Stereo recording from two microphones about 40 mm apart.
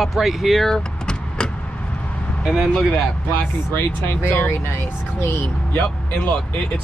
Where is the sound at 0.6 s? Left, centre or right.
Centre.